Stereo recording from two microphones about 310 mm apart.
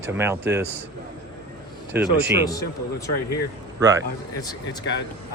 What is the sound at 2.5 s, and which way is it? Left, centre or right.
Speech, centre.